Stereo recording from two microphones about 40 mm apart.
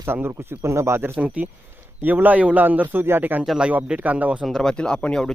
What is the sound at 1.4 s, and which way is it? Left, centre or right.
A man's voice, right.